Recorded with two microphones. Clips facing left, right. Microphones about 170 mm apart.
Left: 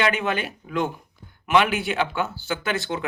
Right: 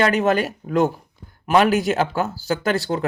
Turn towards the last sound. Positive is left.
turn(degrees=-40)  # may be behind; listen again after turning